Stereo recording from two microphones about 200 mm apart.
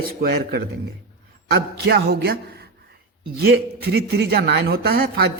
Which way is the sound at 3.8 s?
55° right (ahead or behind).